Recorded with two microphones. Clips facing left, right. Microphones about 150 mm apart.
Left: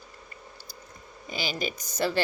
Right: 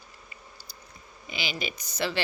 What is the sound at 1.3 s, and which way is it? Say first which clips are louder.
Speech: left 3 dB; 40° left (ahead or behind).